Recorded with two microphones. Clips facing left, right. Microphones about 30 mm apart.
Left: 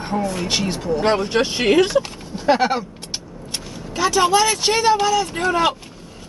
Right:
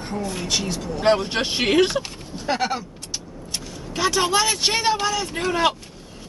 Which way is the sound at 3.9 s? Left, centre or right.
Centre.